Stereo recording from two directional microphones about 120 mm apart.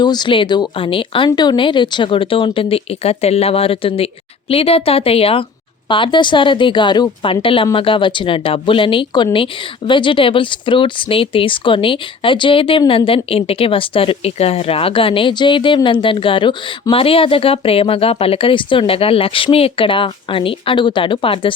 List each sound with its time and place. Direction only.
0.0 s speech: 40° left (ahead or behind)